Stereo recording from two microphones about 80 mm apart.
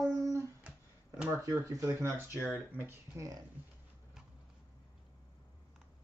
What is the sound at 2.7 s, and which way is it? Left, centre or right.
Speech, right.